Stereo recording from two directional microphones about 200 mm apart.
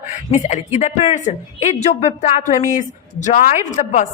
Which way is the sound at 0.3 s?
35° left (ahead or behind).